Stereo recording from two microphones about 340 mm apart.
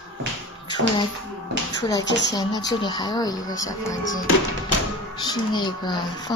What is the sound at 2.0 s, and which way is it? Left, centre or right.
Speech, left.